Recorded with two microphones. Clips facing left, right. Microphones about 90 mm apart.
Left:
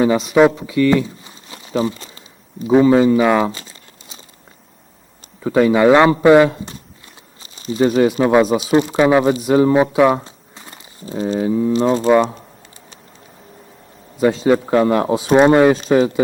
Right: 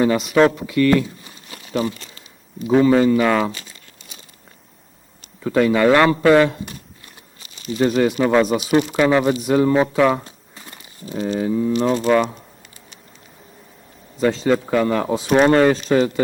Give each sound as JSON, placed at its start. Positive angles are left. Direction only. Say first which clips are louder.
{"t": 0.4, "sound": "a man's voice", "louder": "left 2 dB", "side_deg": 10}
{"t": 1.0, "sound": "a sound", "louder": "left 2 dB", "side_deg": 30}
{"t": 2.7, "sound": "a man's voice", "louder": "left 3 dB", "side_deg": 15}
{"t": 3.5, "sound": "crumpling", "louder": "left 2 dB", "side_deg": 30}
{"t": 5.4, "sound": "a man's voice", "louder": "left 3 dB", "side_deg": 15}
{"t": 7.5, "sound": "crumpling", "louder": "left 3 dB", "side_deg": 35}
{"t": 7.8, "sound": "a man's voice", "louder": "left 3 dB", "side_deg": 10}
{"t": 8.4, "sound": "a man's voice", "louder": "left 2 dB", "side_deg": 30}
{"t": 11.4, "sound": "a man's voice", "louder": "left 3 dB", "side_deg": 10}
{"t": 11.7, "sound": "speech", "louder": "left 4 dB", "side_deg": 30}
{"t": 14.2, "sound": "a man's voice", "louder": "left 3 dB", "side_deg": 10}